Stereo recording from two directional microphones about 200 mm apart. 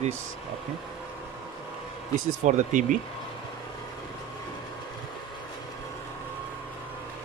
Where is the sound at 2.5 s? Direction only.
40° right (ahead or behind).